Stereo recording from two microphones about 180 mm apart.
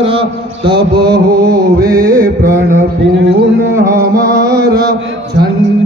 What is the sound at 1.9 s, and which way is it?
Mantra, 20° right (ahead or behind).